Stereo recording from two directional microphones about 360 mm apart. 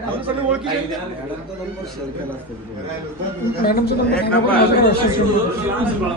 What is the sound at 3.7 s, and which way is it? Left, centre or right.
A man's voice, left.